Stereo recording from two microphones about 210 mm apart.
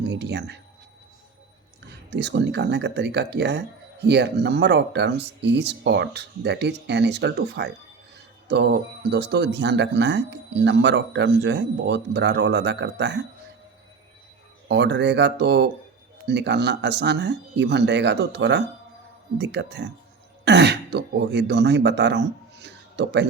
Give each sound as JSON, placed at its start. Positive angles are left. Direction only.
{"t": 0.0, "sound": "speech", "side_deg": -55}
{"t": 2.0, "sound": "speech", "side_deg": -55}
{"t": 9.0, "sound": "speech", "side_deg": -55}
{"t": 14.7, "sound": "speech", "side_deg": -55}